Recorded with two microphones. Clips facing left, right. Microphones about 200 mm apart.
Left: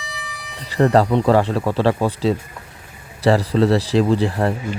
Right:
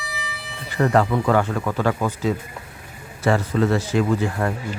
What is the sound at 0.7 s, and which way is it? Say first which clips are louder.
Speech: left 4 dB; 35° left (ahead or behind).